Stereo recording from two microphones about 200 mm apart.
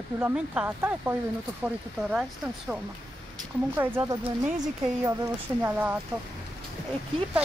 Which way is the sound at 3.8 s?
10° right (ahead or behind).